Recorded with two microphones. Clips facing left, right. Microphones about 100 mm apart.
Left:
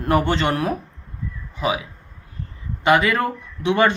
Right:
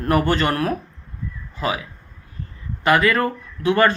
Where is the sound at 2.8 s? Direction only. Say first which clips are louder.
Even; 20° left (ahead or behind).